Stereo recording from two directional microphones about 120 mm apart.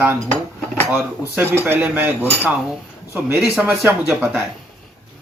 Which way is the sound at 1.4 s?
20° right (ahead or behind).